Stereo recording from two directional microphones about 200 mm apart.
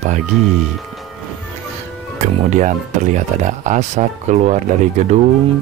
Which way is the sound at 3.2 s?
35° right (ahead or behind).